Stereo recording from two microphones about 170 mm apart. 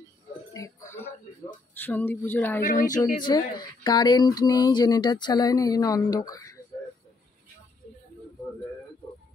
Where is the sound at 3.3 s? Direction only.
25° left (ahead or behind).